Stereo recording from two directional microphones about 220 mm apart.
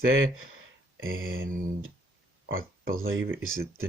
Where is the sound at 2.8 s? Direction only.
40° right (ahead or behind).